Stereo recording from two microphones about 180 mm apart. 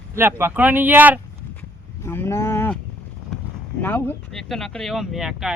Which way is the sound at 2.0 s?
15° left (ahead or behind).